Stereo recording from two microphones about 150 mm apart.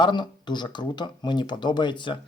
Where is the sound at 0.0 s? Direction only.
30° left (ahead or behind).